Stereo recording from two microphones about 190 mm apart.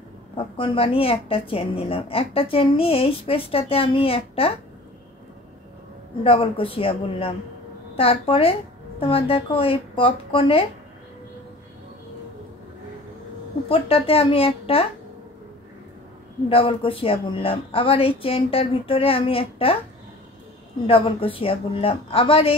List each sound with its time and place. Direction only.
0.6 s a woman's voice: 30° left (ahead or behind)
6.2 s a woman's voice: 30° left (ahead or behind)
13.7 s a woman's voice: 30° left (ahead or behind)
16.4 s a woman's voice: 30° left (ahead or behind)
20.8 s a woman's voice: 30° left (ahead or behind)